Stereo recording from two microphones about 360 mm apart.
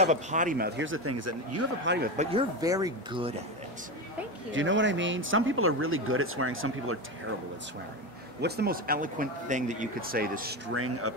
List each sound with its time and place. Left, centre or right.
0.0 s speech: centre; by 1.7 s right
1.9 s speech: right
2.3 s speech: centre
4.5 s speech: right
8.4 s speech: right
10.7 s speech: right